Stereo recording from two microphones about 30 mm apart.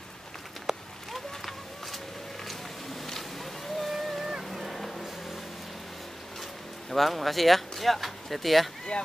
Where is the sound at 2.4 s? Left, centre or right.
Centre.